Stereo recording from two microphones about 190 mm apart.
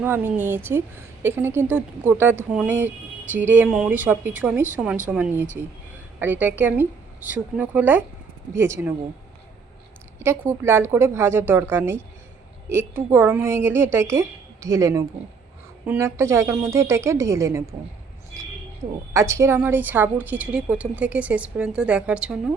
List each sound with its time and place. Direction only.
0.0 s a woman's voice: 10° right (ahead or behind)
10.2 s a woman's voice: 10° right (ahead or behind)
19.1 s a woman's voice: 15° right (ahead or behind)